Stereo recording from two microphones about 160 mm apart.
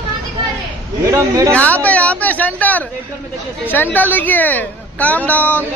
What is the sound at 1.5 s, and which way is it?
Speech, 10° left (ahead or behind).